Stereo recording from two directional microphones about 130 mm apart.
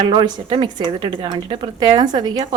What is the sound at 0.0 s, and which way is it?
A woman's voice, 40° right (ahead or behind).